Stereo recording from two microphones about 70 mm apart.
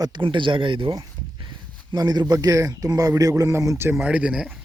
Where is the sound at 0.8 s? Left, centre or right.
Right.